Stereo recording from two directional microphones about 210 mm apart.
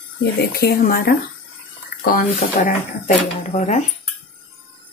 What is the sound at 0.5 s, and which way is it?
Speech, 50° left (ahead or behind).